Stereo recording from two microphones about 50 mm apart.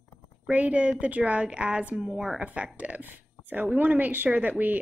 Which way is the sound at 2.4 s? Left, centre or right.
Right.